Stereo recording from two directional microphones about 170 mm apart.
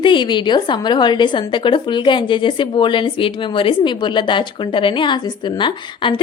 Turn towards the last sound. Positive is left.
turn(degrees=25)  # may be behind; listen again after turning